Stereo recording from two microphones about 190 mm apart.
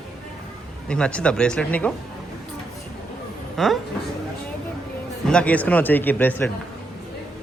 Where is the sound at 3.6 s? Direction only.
Centre (ahead or behind).